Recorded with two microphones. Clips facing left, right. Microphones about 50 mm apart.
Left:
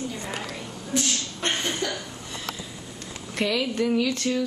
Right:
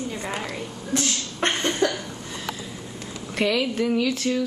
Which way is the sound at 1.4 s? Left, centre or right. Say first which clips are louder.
Right 6 dB; right.